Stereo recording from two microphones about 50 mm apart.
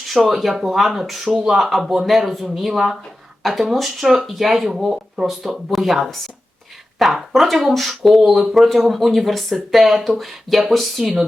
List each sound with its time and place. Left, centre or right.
0.0 s speech: centre
4.0 s speech: centre